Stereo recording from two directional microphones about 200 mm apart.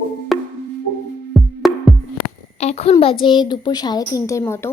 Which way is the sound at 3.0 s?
25° left (ahead or behind).